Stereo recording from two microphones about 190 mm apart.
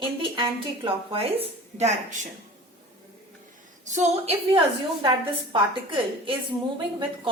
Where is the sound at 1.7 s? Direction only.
40° right (ahead or behind).